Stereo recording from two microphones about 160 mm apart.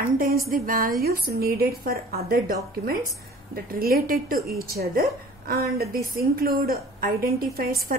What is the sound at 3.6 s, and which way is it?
A woman's voice, 65° right (ahead or behind).